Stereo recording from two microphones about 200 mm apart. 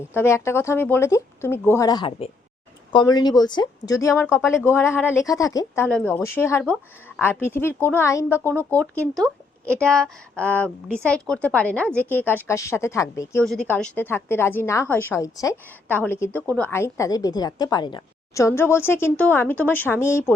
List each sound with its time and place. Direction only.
0.1 s a woman's voice: 10° left (ahead or behind)
13.4 s a woman's voice: 5° left (ahead or behind)